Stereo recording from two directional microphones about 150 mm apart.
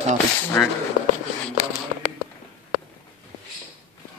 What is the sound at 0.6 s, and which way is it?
Speech, 5° left (ahead or behind).